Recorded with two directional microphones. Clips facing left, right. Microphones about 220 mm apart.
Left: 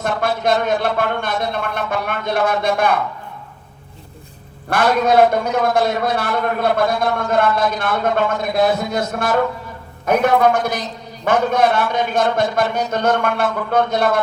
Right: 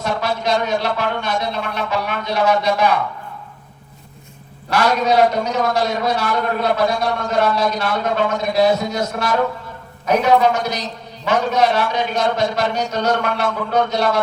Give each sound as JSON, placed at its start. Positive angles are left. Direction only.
{"t": 0.0, "sound": "a man's voice", "side_deg": 50}
{"t": 4.7, "sound": "a man's voice", "side_deg": 50}